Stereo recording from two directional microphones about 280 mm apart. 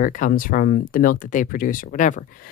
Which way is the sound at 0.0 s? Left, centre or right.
Left.